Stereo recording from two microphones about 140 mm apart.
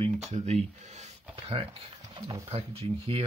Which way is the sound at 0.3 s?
50° right (ahead or behind).